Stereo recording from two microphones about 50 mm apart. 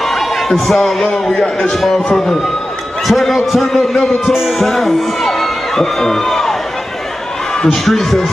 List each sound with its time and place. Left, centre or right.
0.0 s a sound: centre
1.1 s a man's voice: centre
7.5 s speech: centre